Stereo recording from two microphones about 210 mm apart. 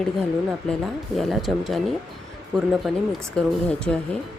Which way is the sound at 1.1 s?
Centre (ahead or behind).